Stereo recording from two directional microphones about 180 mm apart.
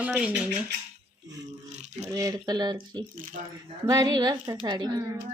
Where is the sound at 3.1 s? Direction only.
50° right (ahead or behind).